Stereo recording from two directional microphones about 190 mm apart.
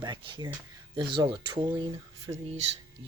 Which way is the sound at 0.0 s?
20° right (ahead or behind).